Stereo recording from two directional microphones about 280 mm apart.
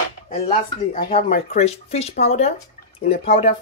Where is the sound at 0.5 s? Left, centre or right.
Left.